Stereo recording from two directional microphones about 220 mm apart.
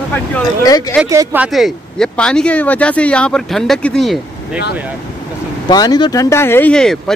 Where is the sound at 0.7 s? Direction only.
15° left (ahead or behind).